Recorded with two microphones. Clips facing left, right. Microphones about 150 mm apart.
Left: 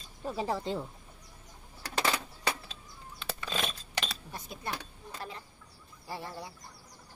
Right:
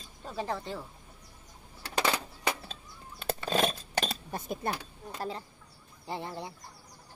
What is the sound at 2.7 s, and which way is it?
Bird flight, 45° right (ahead or behind).